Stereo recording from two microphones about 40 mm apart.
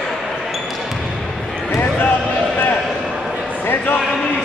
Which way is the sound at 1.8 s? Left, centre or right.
Left.